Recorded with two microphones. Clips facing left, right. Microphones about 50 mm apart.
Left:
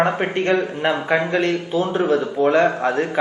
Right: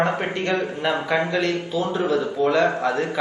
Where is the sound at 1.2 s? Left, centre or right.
Left.